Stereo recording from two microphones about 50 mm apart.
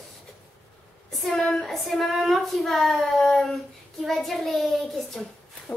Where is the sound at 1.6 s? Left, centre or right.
Centre.